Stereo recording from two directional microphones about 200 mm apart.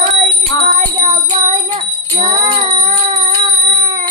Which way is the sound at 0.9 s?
20° right (ahead or behind).